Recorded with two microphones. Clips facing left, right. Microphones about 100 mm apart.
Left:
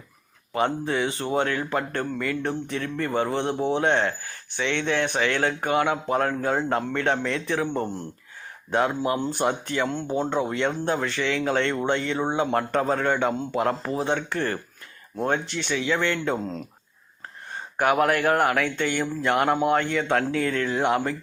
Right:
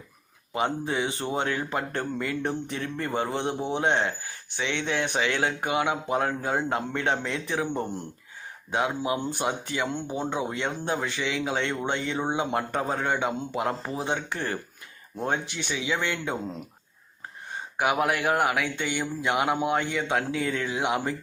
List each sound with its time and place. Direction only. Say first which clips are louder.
0.5 s speech: left 3 dB; 15° right (ahead or behind)
9.0 s speech: left 4 dB; 10° right (ahead or behind)
17.7 s speech: left 4 dB; 10° right (ahead or behind)